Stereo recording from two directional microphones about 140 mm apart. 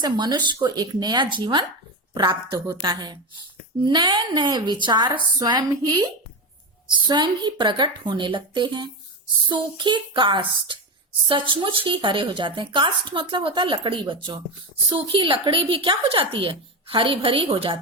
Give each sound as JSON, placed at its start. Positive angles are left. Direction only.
{"t": 0.0, "sound": "speech", "side_deg": -30}